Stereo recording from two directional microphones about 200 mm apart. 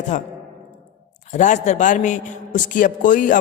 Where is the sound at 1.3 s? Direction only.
35° left (ahead or behind).